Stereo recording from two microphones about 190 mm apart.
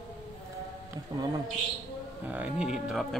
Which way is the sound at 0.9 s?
20° right (ahead or behind).